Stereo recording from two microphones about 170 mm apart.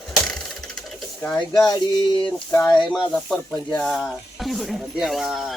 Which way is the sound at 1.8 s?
25° left (ahead or behind).